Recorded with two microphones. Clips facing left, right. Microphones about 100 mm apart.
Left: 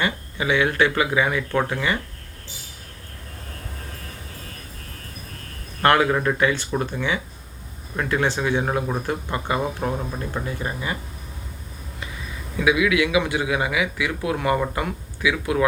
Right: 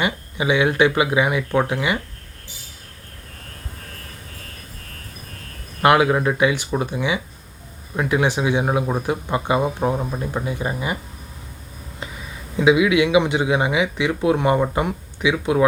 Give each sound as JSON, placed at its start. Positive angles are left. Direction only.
{"t": 0.0, "sound": "speech", "side_deg": -15}
{"t": 5.8, "sound": "speech", "side_deg": -15}
{"t": 12.5, "sound": "speech", "side_deg": -25}